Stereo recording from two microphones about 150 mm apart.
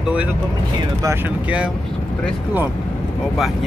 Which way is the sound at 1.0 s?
15° right (ahead or behind).